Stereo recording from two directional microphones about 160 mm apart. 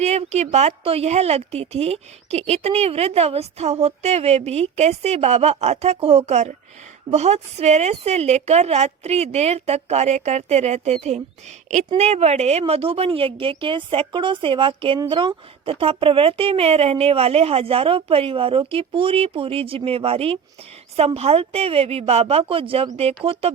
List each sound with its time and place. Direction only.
0.0 s a woman's voice: 40° right (ahead or behind)